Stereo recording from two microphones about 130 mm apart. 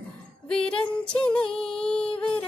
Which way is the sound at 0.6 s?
40° left (ahead or behind).